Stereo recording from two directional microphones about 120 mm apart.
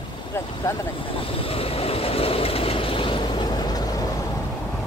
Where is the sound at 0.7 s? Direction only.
25° left (ahead or behind).